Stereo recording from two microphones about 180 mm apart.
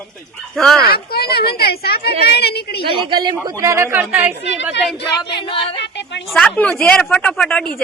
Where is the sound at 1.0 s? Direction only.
60° left (ahead or behind).